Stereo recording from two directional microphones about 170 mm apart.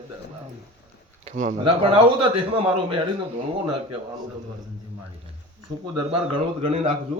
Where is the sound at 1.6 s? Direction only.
30° right (ahead or behind).